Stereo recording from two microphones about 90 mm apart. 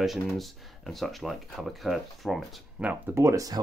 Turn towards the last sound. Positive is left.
turn(degrees=-35)  # may be behind; listen again after turning